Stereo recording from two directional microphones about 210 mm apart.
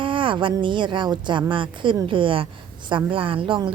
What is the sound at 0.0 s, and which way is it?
A woman's voice, 25° right (ahead or behind).